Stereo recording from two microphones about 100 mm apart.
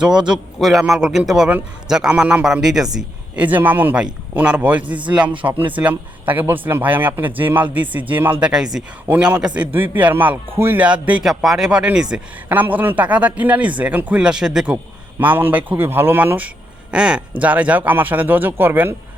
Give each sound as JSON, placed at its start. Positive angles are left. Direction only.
{"t": 0.0, "sound": "speech", "side_deg": -10}
{"t": 3.4, "sound": "speech", "side_deg": -20}
{"t": 12.5, "sound": "speech", "side_deg": -15}
{"t": 15.2, "sound": "speech", "side_deg": -20}